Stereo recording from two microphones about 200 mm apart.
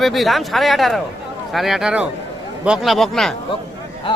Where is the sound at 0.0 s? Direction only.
Centre (ahead or behind).